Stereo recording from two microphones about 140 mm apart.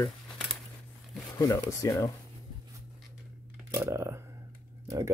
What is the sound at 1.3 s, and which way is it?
Speech, 25° left (ahead or behind).